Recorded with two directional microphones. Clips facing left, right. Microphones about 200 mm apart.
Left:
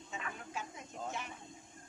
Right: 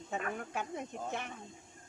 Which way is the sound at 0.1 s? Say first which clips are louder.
Right 7 dB; 55° right (ahead or behind).